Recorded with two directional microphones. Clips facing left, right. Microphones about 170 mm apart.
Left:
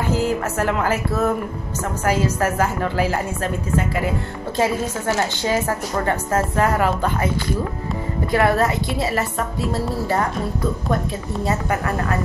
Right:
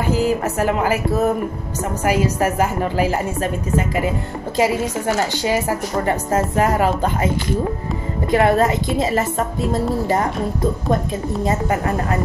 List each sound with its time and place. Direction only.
0.0 s a woman's voice: 15° right (ahead or behind)
4.6 s a woman's voice: 15° right (ahead or behind)
8.3 s a woman's voice: 20° right (ahead or behind)
11.4 s a woman's voice: 20° right (ahead or behind)